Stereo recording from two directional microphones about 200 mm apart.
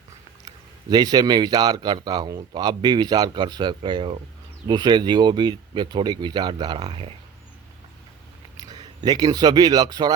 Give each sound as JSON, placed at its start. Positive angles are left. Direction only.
{"t": 0.4, "sound": "a man's voice", "side_deg": -20}
{"t": 8.5, "sound": "speech", "side_deg": -20}